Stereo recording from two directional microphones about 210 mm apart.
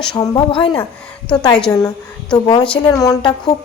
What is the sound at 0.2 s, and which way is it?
Speech, 20° left (ahead or behind).